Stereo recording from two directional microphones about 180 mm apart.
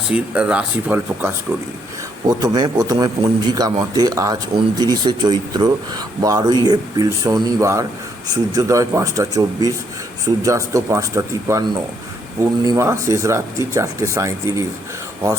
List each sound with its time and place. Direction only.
0.1 s speech: 5° right (ahead or behind)
2.2 s a man's voice: 20° right (ahead or behind)